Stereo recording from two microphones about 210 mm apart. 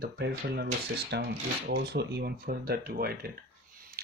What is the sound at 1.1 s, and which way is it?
Rub, 55° right (ahead or behind).